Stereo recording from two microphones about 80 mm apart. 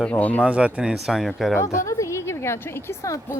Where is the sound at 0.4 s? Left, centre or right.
Centre.